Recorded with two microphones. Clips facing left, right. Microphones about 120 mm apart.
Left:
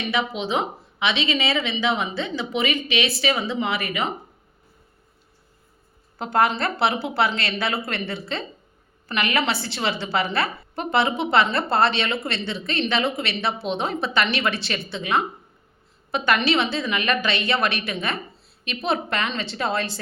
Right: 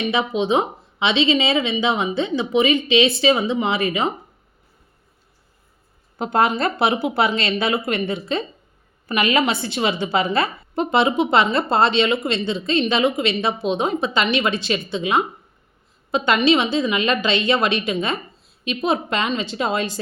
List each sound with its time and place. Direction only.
0.1 s speech: 20° right (ahead or behind)
6.1 s speech: 20° right (ahead or behind)